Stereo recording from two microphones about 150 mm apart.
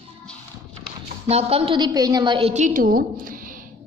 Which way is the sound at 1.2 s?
40° right (ahead or behind).